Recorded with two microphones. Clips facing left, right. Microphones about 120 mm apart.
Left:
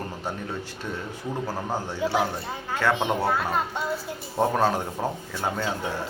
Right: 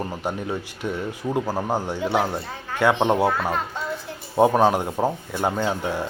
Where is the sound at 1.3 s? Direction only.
15° right (ahead or behind).